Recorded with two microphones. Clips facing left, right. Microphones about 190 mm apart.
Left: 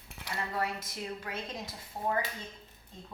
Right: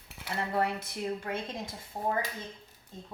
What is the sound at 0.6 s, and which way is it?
Speech, 55° right (ahead or behind).